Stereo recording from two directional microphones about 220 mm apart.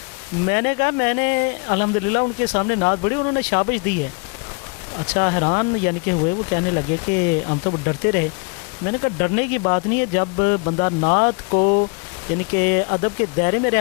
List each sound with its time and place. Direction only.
0.4 s speech: 15° left (ahead or behind)
4.9 s speech: 15° left (ahead or behind)
7.4 s speech: 25° left (ahead or behind)
11.5 s speech: 35° left (ahead or behind)
12.5 s speech: 15° left (ahead or behind)